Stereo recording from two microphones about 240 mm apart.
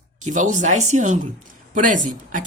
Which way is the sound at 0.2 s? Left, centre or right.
Right.